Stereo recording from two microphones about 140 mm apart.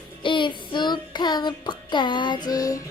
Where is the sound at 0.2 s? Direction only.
35° left (ahead or behind).